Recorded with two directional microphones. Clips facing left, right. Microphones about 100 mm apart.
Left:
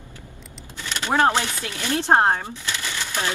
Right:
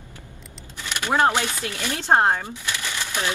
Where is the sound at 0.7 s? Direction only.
15° right (ahead or behind).